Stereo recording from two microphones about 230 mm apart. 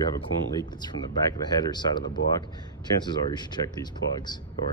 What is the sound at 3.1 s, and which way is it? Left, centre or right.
Speech, centre.